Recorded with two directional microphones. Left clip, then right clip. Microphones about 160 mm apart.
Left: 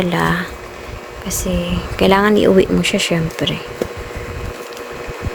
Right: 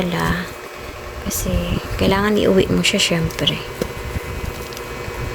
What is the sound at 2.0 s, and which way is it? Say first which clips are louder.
Speech: left 5 dB; 40° left (ahead or behind).